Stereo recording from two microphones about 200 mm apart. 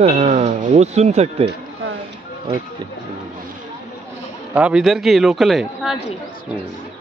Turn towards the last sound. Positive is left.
turn(degrees=0)  # may be behind; listen again after turning